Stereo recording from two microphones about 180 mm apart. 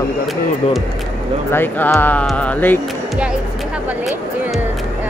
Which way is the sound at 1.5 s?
10° left (ahead or behind).